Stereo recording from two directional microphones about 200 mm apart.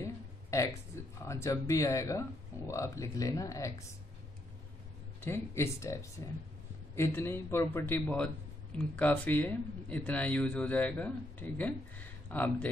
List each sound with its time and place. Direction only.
0.0 s a sound: 15° left (ahead or behind)
1.2 s speech: 15° left (ahead or behind)
5.2 s speech: 10° left (ahead or behind)